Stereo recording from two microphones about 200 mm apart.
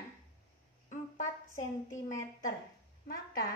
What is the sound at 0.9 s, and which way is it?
A woman's voice, 40° left (ahead or behind).